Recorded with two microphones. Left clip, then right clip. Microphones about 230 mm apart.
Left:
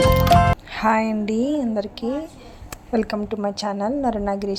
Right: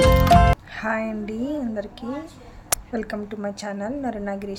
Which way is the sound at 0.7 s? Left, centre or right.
Centre.